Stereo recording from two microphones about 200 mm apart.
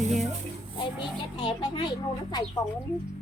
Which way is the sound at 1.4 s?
20° left (ahead or behind).